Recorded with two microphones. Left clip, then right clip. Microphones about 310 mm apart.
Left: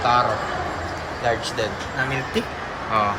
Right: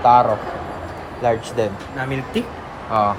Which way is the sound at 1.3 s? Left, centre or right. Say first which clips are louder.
Right 4 dB; right.